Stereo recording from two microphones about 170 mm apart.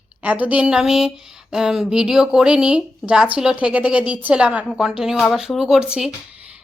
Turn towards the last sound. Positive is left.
turn(degrees=-10)  # may be behind; listen again after turning